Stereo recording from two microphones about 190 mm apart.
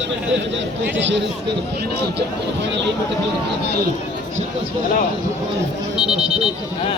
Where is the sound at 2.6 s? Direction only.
65° right (ahead or behind).